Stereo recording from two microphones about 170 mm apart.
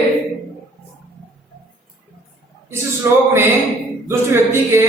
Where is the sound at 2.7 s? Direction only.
15° right (ahead or behind).